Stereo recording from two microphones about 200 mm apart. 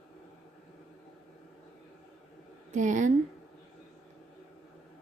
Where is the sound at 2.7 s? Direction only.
40° right (ahead or behind).